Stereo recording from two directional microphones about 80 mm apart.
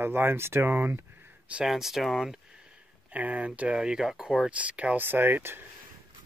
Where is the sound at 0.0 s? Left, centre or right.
Right.